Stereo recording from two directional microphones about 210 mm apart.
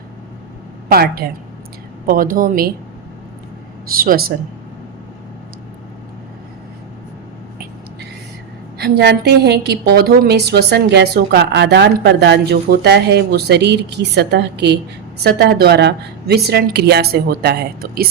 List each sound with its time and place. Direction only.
0.9 s a woman's voice: 45° right (ahead or behind)
3.8 s a woman's voice: 45° right (ahead or behind)
8.8 s a woman's voice: 50° right (ahead or behind)